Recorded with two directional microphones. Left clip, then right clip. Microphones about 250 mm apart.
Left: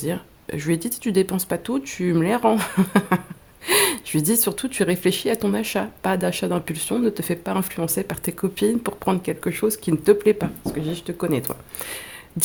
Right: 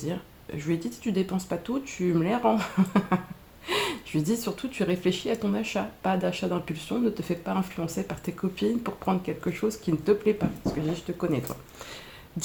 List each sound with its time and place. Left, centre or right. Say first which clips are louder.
0.0 s speech: left 7 dB; left